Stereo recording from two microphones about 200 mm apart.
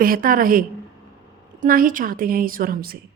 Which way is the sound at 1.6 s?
45° right (ahead or behind).